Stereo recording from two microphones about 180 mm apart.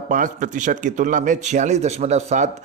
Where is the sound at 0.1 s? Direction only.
45° right (ahead or behind).